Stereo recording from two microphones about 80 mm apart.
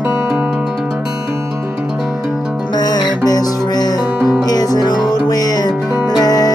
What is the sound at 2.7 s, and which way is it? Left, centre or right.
Music, left.